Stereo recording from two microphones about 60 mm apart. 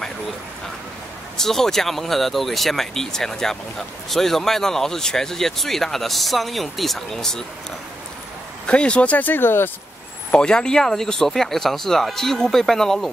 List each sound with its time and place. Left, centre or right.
1.4 s speech: centre
8.6 s speech: centre; by 9.7 s left
10.3 s speech: centre